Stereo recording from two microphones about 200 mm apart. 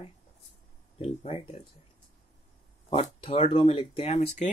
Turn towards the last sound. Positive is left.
turn(degrees=30)  # may be behind; listen again after turning